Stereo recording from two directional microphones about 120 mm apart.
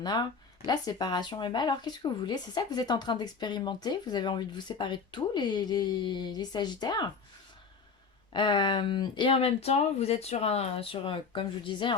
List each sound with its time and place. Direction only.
0.0 s speech: 40° left (ahead or behind)
8.3 s speech: 40° left (ahead or behind); by 10.8 s 60° left (ahead or behind)
10.9 s speech: 45° left (ahead or behind)